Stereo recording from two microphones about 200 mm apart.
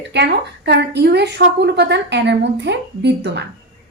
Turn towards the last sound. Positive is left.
turn(degrees=-60)  # may be behind; listen again after turning